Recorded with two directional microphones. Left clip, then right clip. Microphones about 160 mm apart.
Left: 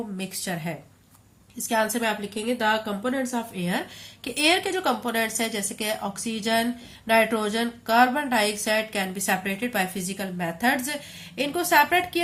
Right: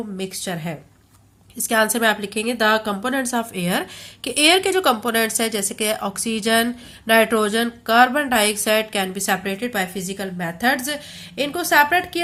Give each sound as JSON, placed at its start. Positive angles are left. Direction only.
{"t": 0.2, "sound": "speech", "side_deg": -20}
{"t": 1.6, "sound": "a woman's voice", "side_deg": -40}